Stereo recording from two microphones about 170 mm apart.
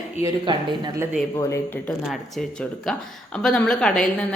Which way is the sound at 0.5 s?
30° right (ahead or behind).